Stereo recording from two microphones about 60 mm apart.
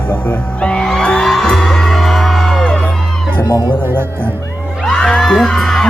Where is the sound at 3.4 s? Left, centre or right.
Left.